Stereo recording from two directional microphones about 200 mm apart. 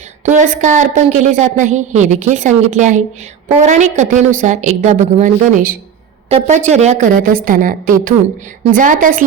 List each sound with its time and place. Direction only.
0.3 s a woman's voice: 40° right (ahead or behind)